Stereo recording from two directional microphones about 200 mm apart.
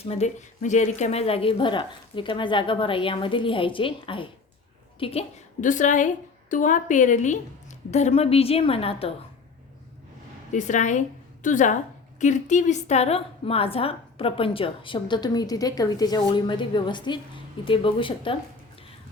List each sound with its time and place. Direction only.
0.0 s a woman's voice: 30° left (ahead or behind)
10.5 s a woman's voice: 40° left (ahead or behind)